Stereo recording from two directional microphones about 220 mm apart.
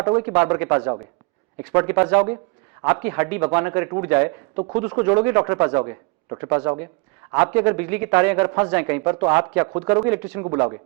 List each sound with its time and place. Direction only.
0.1 s speech: 10° right (ahead or behind)